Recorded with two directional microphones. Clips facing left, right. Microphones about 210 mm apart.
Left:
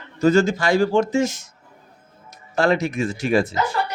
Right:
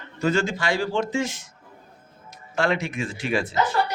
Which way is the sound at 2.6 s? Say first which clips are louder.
Left 5 dB; 40° left (ahead or behind).